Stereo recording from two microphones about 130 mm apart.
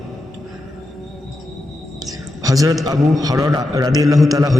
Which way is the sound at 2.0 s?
25° right (ahead or behind).